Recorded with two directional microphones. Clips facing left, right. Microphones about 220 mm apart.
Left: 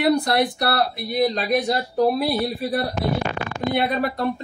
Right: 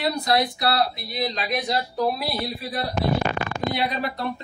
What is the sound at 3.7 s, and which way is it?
Speech, 55° left (ahead or behind).